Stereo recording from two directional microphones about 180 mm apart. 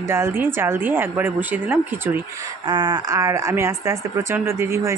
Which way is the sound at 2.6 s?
25° right (ahead or behind).